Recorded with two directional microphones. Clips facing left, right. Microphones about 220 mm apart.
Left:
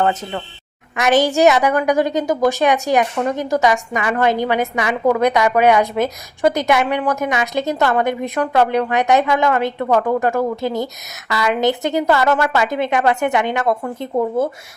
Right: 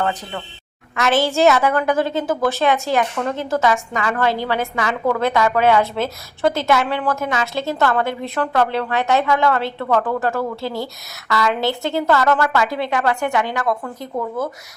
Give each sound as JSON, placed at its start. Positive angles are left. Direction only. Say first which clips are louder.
{"t": 0.0, "sound": "a woman's voice", "louder": "left 4 dB", "side_deg": 25}